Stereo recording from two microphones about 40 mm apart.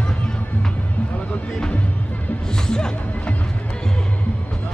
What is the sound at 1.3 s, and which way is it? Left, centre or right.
Music, left.